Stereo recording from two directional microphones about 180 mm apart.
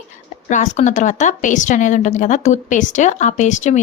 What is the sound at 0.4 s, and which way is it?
Speech, 45° left (ahead or behind).